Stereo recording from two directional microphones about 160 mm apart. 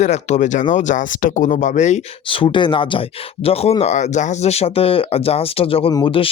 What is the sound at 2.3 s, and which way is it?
Speech, 30° left (ahead or behind).